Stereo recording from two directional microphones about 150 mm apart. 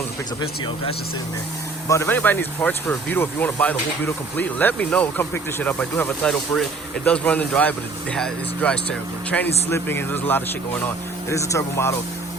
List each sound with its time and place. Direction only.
1.9 s speech: 15° left (ahead or behind)